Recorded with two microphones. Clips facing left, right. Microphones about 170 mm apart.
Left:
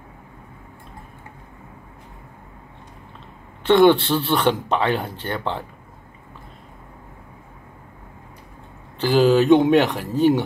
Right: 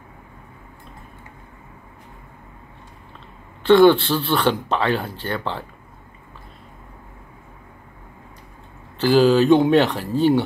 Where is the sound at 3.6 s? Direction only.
20° left (ahead or behind).